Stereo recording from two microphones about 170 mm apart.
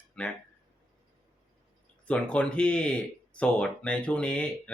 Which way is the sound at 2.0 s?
5° left (ahead or behind).